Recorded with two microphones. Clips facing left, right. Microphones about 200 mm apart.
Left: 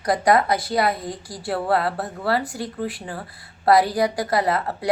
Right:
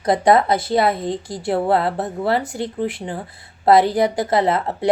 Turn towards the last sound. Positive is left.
turn(degrees=-25)  # may be behind; listen again after turning